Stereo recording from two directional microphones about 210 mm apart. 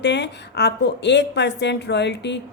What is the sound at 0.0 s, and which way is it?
A woman's voice, 55° left (ahead or behind).